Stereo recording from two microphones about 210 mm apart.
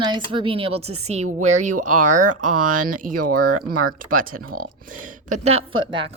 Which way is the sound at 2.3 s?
90° right.